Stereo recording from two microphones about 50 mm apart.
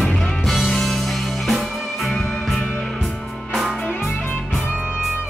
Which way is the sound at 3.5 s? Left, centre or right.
Centre.